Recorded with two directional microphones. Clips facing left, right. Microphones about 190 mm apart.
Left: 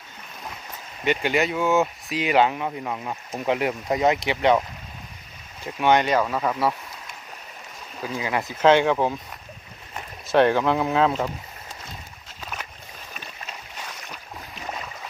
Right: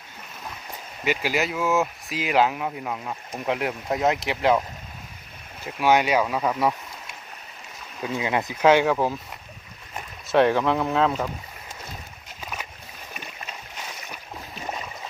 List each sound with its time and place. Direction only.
1.0 s speech: 5° right (ahead or behind)
5.6 s speech: 5° right (ahead or behind)
8.1 s speech: 20° right (ahead or behind)
8.6 s speech: 10° right (ahead or behind)
10.2 s speech: centre (ahead or behind)
12.4 s boat: 10° right (ahead or behind)